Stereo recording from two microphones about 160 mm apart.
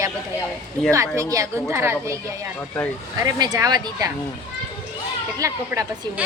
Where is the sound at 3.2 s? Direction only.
25° right (ahead or behind).